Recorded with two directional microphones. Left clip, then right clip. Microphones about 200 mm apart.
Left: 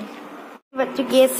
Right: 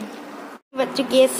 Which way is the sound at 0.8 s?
5° right (ahead or behind).